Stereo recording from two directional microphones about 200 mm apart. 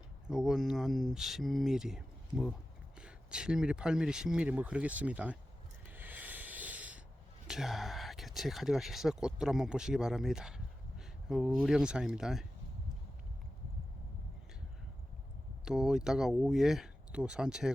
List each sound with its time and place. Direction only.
0.3 s speech: 5° right (ahead or behind)
5.9 s rub: 10° right (ahead or behind)
7.4 s speech: centre (ahead or behind)
15.6 s speech: 5° right (ahead or behind)